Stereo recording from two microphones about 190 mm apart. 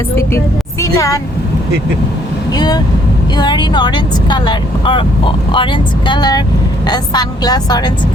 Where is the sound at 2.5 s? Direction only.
20° left (ahead or behind).